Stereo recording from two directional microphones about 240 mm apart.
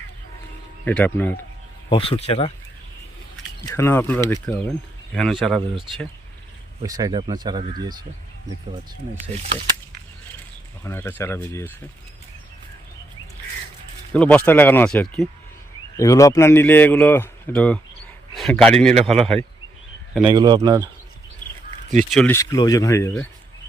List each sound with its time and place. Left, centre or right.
0.9 s a man's voice: centre
1.9 s speech: left
3.8 s a man's voice: centre
6.8 s speech: centre
10.8 s a man's voice: centre
14.1 s a man's voice: centre
20.2 s speech: centre
22.1 s a man's voice: centre